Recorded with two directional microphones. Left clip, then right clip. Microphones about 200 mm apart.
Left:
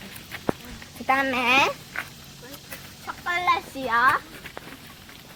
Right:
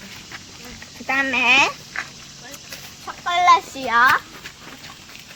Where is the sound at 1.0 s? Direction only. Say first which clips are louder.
Right 4 dB; 40° left (ahead or behind).